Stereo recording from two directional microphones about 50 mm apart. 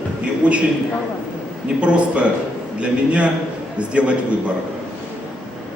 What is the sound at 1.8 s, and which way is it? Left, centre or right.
A man's voice, right.